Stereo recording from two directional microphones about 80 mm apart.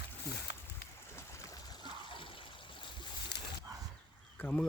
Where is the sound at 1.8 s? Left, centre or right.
Left.